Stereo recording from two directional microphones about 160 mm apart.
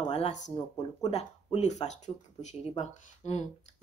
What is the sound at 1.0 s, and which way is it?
A woman's voice, 45° left (ahead or behind).